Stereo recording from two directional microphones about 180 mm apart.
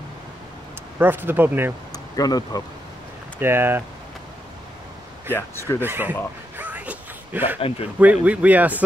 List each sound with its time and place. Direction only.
0.9 s speech: 10° right (ahead or behind)
1.9 s a sound: 20° left (ahead or behind)
3.3 s speech: 10° right (ahead or behind)
5.3 s speech: 15° left (ahead or behind)
5.8 s speech: 10° right (ahead or behind)
6.6 s a sound: 10° right (ahead or behind)
8.0 s speech: 10° right (ahead or behind)